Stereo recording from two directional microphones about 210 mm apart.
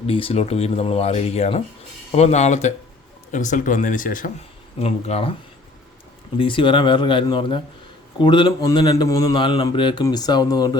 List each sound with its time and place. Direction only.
0.1 s speech: 25° left (ahead or behind)
6.4 s speech: 25° left (ahead or behind)